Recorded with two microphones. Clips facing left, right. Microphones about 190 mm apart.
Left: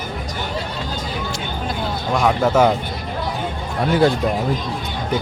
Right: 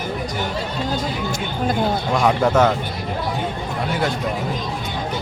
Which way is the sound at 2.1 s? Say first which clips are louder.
Left 2 dB; centre (ahead or behind).